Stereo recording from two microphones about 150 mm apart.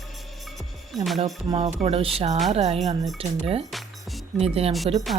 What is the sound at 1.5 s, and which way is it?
Speech, 45° right (ahead or behind).